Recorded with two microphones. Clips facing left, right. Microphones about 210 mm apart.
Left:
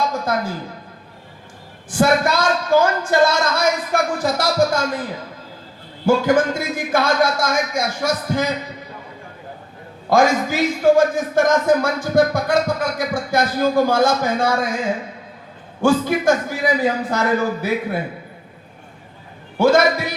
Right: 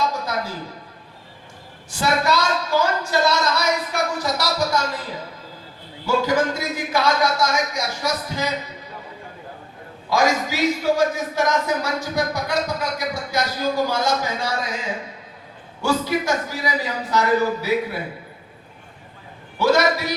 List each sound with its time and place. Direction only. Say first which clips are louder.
1.9 s a woman's voice: left 4 dB; 50° left (ahead or behind)
6.1 s a man's voice: left 4 dB; 50° left (ahead or behind)
10.1 s a man's voice: left 4 dB; 50° left (ahead or behind)
15.8 s a man's voice: left 5 dB; 50° left (ahead or behind)
19.5 s a man's voice: left 4 dB; 50° left (ahead or behind)